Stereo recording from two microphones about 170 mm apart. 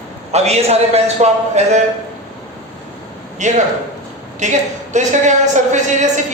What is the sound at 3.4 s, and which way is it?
A woman's voice, 45° right (ahead or behind).